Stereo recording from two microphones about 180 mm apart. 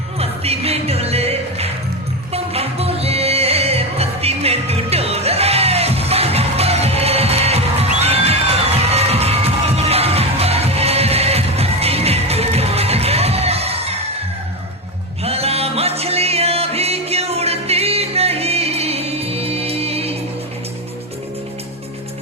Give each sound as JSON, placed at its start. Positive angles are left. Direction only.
{"t": 0.2, "sound": "music", "side_deg": -35}
{"t": 15.2, "sound": "music", "side_deg": -35}